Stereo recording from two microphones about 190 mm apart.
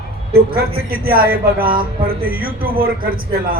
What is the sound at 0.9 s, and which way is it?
A man's voice, 50° right (ahead or behind).